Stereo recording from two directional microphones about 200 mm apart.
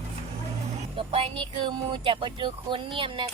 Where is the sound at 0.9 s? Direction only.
25° right (ahead or behind).